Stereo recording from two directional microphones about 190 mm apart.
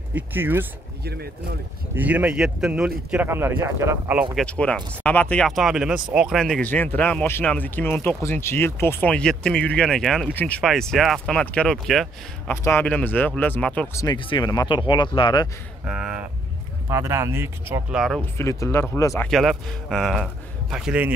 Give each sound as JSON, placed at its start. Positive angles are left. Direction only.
{"t": 0.1, "sound": "speech", "side_deg": -10}
{"t": 1.0, "sound": "speech", "side_deg": -55}
{"t": 2.0, "sound": "speech", "side_deg": -5}
{"t": 4.5, "sound": "speech", "side_deg": 5}
{"t": 14.0, "sound": "speech", "side_deg": 25}
{"t": 15.8, "sound": "speech", "side_deg": -5}
{"t": 17.9, "sound": "speech", "side_deg": 0}
{"t": 18.4, "sound": "speech", "side_deg": 15}
{"t": 19.3, "sound": "speech", "side_deg": 0}